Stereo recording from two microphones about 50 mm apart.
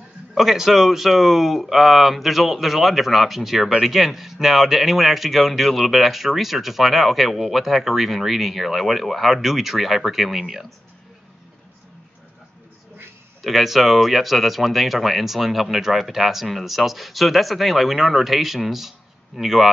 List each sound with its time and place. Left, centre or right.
0.4 s a man's voice: centre
13.4 s a man's voice: centre